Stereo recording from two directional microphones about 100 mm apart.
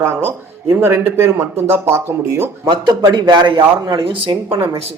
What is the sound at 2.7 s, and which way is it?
A man's voice, 45° right (ahead or behind).